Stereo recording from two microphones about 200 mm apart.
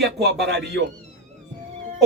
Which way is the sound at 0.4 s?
60° right (ahead or behind).